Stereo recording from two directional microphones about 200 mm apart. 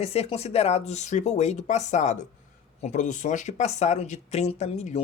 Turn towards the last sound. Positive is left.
turn(degrees=35)  # may be behind; listen again after turning